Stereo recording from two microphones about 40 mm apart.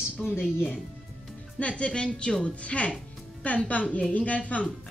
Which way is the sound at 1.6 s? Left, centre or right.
Left.